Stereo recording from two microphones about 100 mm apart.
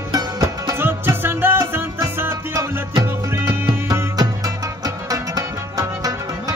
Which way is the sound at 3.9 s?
35° right (ahead or behind).